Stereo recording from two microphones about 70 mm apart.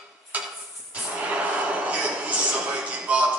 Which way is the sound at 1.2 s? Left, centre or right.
Centre.